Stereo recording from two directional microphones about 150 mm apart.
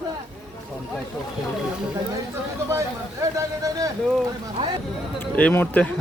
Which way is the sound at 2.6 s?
20° right (ahead or behind).